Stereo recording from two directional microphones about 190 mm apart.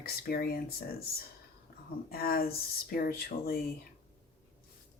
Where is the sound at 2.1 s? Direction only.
55° left (ahead or behind).